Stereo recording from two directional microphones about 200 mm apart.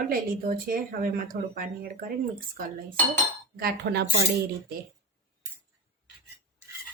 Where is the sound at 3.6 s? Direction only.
50° right (ahead or behind).